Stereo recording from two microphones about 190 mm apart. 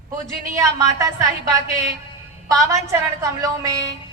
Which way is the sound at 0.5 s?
15° right (ahead or behind).